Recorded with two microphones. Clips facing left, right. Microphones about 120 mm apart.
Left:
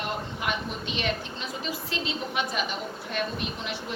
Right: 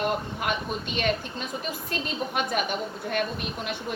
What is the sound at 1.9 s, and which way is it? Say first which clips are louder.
A woman's voice: right 4 dB; 50° right (ahead or behind).